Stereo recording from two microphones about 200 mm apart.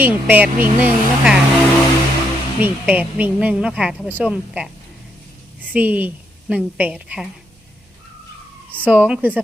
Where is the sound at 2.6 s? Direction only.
5° right (ahead or behind).